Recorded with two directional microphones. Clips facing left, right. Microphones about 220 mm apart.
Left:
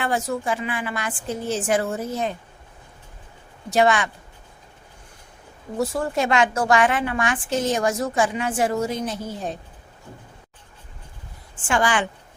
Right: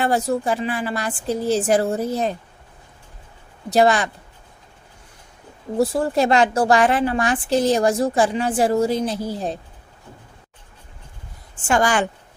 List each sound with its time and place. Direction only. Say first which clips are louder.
0.0 s a woman's voice: right 4 dB; 35° right (ahead or behind)
3.7 s a woman's voice: right 3 dB; 35° right (ahead or behind)
5.8 s a woman's voice: right 4 dB; 35° right (ahead or behind)
11.7 s a woman's voice: right 3 dB; 40° right (ahead or behind)